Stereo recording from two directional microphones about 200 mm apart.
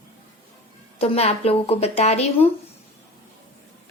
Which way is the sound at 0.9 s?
30° left (ahead or behind).